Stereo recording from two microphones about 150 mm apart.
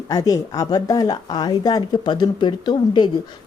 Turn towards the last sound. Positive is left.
turn(degrees=30)  # may be behind; listen again after turning